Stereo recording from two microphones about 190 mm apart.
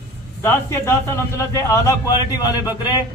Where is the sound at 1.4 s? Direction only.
15° left (ahead or behind).